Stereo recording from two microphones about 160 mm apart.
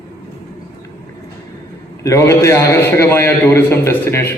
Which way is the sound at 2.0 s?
20° left (ahead or behind).